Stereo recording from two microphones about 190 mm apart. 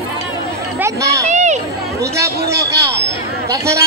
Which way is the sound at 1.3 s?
40° right (ahead or behind).